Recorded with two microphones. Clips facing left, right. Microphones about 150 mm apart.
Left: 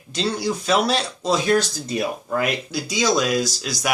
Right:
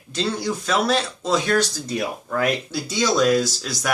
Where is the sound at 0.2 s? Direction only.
15° left (ahead or behind).